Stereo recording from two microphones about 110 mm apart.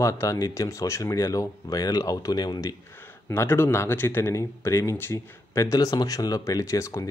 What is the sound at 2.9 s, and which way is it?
Speech, 20° left (ahead or behind).